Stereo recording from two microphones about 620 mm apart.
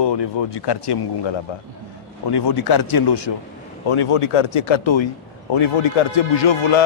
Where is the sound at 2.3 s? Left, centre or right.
Left.